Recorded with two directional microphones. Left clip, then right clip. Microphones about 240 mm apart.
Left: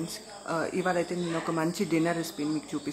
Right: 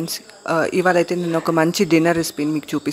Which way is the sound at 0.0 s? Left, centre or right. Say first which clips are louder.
Right 10 dB; right.